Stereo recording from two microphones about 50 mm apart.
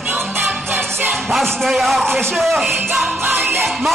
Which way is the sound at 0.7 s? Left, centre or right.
Right.